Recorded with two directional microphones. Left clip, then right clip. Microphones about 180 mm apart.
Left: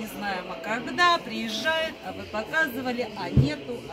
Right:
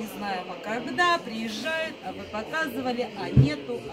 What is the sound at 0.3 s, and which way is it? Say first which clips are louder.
Speech: left 1 dB; 5° right (ahead or behind).